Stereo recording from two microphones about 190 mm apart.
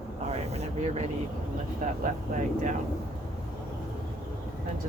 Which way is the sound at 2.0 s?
40° right (ahead or behind).